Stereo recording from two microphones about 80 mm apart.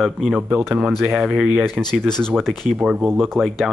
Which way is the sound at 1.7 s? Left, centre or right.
Centre.